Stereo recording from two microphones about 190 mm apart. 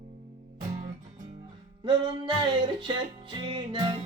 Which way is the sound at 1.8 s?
25° right (ahead or behind).